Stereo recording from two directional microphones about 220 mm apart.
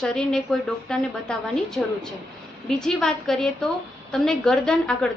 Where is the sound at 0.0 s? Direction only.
5° left (ahead or behind).